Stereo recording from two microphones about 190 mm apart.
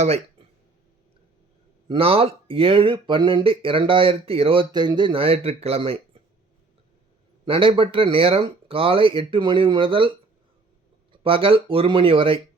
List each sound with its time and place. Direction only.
0.0 s speech: 35° right (ahead or behind)
1.9 s speech: 30° right (ahead or behind)
7.4 s speech: 30° right (ahead or behind)
11.1 s speech: 30° right (ahead or behind)